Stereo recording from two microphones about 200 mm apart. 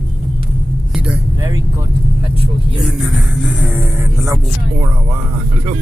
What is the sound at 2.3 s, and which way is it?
Speech, 25° right (ahead or behind).